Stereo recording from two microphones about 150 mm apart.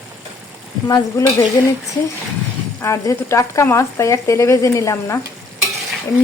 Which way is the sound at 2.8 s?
20° left (ahead or behind).